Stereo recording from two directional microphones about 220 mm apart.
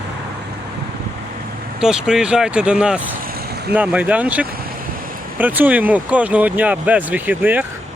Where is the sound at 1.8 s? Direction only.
5° right (ahead or behind).